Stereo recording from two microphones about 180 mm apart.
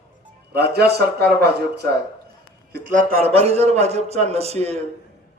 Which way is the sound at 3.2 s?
35° right (ahead or behind).